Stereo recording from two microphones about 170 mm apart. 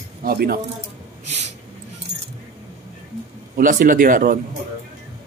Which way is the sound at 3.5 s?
50° right (ahead or behind).